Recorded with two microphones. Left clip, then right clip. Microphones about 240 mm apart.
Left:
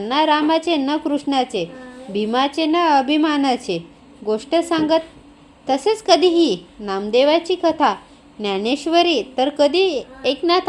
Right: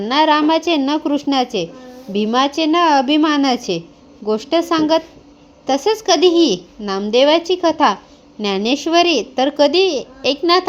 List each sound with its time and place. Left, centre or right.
0.0 s speech: right